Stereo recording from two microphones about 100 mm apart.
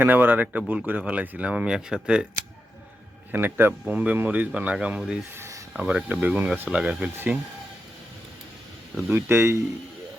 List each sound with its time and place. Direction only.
0.0 s speech: 20° right (ahead or behind)
3.3 s speech: 20° right (ahead or behind)
9.0 s speech: 25° right (ahead or behind)